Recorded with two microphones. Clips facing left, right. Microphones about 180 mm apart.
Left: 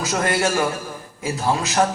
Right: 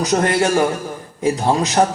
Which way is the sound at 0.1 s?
30° right (ahead or behind).